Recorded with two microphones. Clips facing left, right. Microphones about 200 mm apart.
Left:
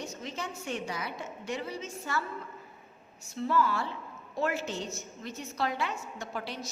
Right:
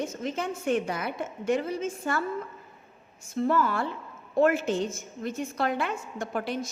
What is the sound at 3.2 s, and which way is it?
A woman's voice, 50° right (ahead or behind).